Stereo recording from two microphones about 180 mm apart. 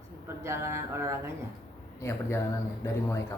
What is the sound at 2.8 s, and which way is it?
Speech, 15° left (ahead or behind).